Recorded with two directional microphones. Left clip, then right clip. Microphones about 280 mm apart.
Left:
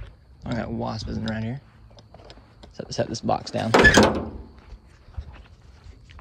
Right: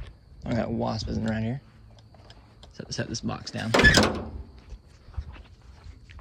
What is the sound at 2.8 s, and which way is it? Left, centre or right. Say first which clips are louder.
Speech: left 6 dB; centre.